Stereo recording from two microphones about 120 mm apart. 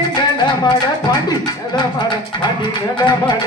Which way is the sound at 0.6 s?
35° left (ahead or behind).